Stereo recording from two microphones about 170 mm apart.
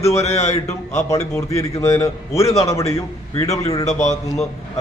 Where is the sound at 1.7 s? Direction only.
15° left (ahead or behind).